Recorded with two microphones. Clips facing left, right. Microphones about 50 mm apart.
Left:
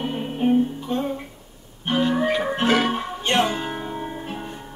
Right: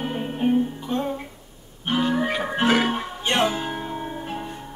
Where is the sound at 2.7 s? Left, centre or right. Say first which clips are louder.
Left 1 dB; centre.